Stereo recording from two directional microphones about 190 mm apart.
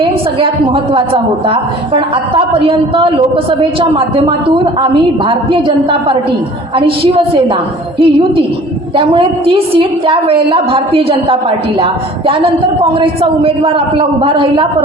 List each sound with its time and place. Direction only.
0.0 s a woman's voice: 30° right (ahead or behind)